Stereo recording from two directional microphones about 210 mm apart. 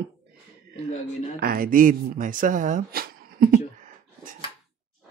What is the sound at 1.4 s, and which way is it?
Speech, 45° right (ahead or behind).